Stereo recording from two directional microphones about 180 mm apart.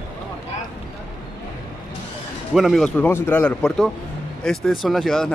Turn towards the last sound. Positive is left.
turn(degrees=0)  # may be behind; listen again after turning